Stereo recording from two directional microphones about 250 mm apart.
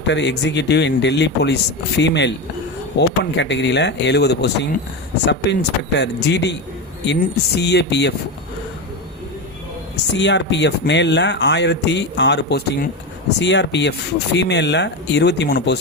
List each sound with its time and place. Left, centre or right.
0.0 s speech: left
9.9 s speech: left